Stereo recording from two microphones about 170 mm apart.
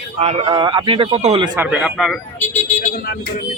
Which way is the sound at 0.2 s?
35° right (ahead or behind).